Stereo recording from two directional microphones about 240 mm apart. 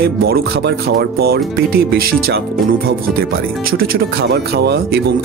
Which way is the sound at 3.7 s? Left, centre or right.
Right.